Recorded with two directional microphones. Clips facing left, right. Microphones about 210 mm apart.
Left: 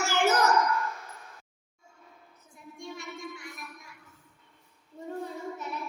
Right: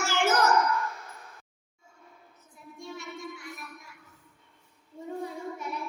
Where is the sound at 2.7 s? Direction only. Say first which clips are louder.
Even; 5° right (ahead or behind).